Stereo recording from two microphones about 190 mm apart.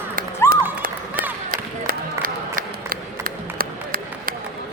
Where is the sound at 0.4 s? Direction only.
15° left (ahead or behind).